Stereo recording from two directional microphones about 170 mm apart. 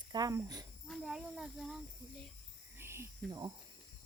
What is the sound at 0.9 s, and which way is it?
Speech, 5° right (ahead or behind).